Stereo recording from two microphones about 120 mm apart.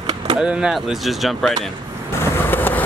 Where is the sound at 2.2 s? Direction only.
15° left (ahead or behind).